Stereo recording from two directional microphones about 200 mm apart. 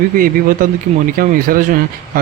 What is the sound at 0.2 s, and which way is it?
Speech, 45° right (ahead or behind).